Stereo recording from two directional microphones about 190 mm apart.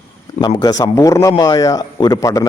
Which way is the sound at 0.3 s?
20° left (ahead or behind).